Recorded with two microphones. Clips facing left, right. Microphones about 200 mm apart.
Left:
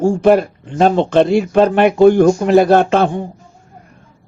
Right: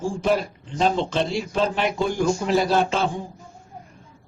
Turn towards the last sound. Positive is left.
turn(degrees=60)  # may be behind; listen again after turning